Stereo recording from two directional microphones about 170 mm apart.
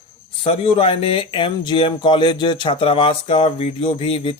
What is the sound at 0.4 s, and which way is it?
Speech, 35° left (ahead or behind).